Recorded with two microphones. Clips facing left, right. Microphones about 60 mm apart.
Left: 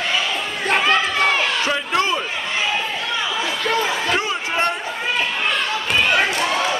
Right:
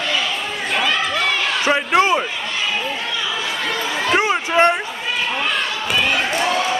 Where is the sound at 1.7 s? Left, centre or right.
Right.